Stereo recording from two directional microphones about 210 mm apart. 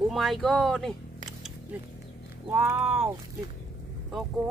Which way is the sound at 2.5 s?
10° right (ahead or behind).